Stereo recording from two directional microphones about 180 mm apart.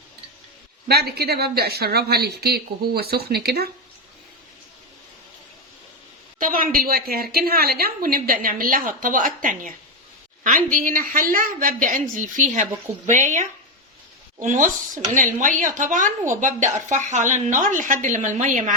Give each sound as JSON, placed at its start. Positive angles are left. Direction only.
{"t": 0.9, "sound": "a woman's voice", "side_deg": -60}
{"t": 6.4, "sound": "a woman's voice", "side_deg": -50}
{"t": 14.4, "sound": "a woman's voice", "side_deg": -45}